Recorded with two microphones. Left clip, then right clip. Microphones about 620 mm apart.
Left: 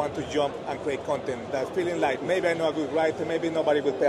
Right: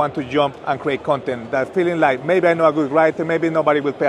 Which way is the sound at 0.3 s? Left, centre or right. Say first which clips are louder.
Right 8 dB; right.